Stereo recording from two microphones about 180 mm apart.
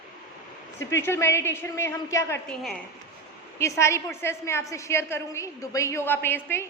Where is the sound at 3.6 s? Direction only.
15° left (ahead or behind).